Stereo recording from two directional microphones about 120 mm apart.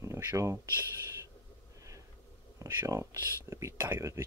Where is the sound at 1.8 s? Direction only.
25° right (ahead or behind).